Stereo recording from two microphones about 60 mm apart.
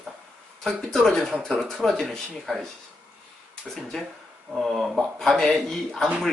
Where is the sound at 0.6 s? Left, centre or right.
Centre.